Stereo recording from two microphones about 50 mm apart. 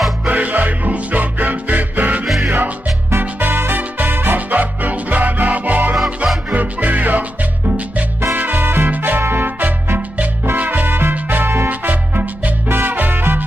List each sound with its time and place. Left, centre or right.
0.3 s music: right
3.3 s music: right
8.4 s music: right
12.9 s music: right